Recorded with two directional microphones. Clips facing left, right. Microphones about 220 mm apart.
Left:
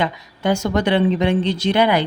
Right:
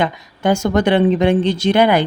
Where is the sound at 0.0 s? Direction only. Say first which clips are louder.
Right 3 dB; 50° right (ahead or behind).